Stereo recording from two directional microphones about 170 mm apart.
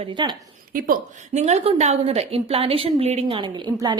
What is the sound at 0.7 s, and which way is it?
A woman's voice, 55° right (ahead or behind).